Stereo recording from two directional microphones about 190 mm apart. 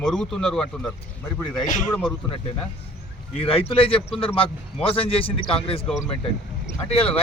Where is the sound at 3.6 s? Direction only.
30° left (ahead or behind).